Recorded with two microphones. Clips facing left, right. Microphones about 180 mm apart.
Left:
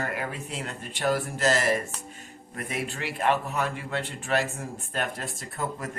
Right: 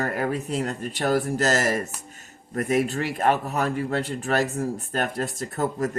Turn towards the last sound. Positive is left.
turn(degrees=-40)  # may be behind; listen again after turning